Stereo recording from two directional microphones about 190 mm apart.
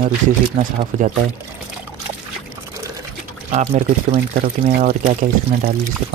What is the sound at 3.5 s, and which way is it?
Speech, 35° right (ahead or behind).